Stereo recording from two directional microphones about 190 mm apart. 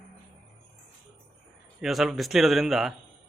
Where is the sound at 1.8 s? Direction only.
Centre (ahead or behind).